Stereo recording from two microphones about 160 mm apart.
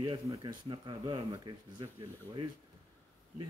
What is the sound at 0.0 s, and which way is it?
Speech, 30° right (ahead or behind).